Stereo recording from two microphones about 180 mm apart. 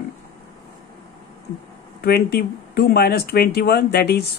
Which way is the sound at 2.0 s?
60° left (ahead or behind).